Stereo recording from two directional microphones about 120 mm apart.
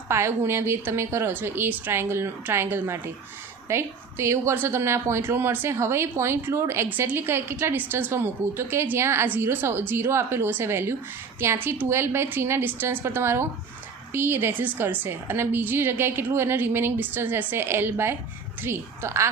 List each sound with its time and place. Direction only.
0.1 s a woman's voice: 20° right (ahead or behind)